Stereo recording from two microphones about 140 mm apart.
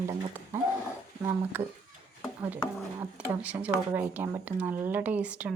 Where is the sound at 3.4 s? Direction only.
10° right (ahead or behind).